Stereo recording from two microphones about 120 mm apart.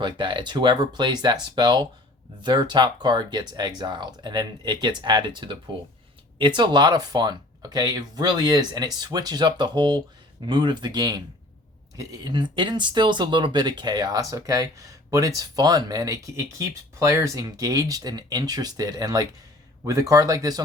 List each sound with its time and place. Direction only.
0.0 s speech: 40° right (ahead or behind)
6.6 s speech: 40° right (ahead or behind)